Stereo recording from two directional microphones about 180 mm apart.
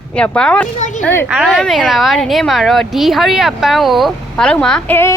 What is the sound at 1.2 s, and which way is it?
Speech, centre (ahead or behind).